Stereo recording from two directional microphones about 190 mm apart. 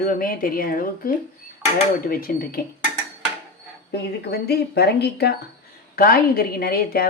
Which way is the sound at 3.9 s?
60° left (ahead or behind).